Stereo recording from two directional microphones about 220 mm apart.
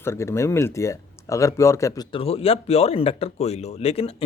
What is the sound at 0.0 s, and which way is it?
Speech, 10° left (ahead or behind).